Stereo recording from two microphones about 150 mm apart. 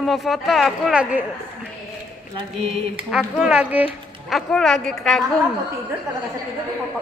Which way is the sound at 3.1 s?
5° right (ahead or behind).